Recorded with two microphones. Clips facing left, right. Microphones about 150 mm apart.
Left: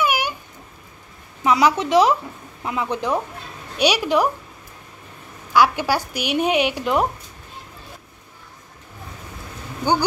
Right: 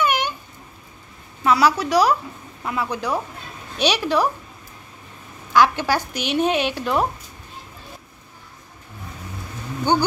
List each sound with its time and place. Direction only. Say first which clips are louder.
0.0 s a sound: even; 10° left (ahead or behind)
1.4 s speech: even; 20° left (ahead or behind)
5.5 s speech: even; 10° left (ahead or behind)
9.9 s speech: even; 10° left (ahead or behind)